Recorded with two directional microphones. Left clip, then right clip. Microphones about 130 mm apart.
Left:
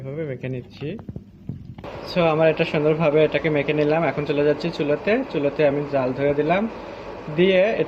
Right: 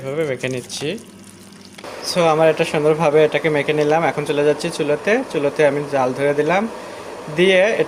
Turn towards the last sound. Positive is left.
turn(degrees=-30)  # may be behind; listen again after turning